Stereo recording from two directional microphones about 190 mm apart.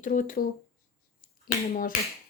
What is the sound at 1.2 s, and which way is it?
Finger snapping, 50° left (ahead or behind).